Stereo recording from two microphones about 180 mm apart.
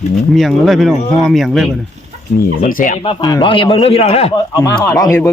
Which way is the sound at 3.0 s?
25° left (ahead or behind).